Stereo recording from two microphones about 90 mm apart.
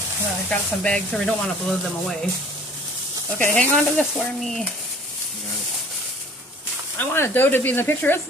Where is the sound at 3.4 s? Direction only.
20° left (ahead or behind).